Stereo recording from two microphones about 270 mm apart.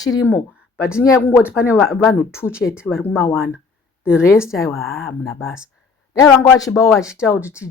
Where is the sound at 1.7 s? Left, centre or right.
Centre.